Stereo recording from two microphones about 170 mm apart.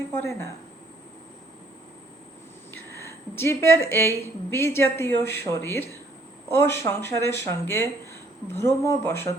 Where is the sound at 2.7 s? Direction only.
15° left (ahead or behind).